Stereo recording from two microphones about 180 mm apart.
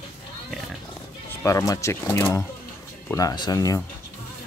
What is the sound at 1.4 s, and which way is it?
Speech, 15° left (ahead or behind).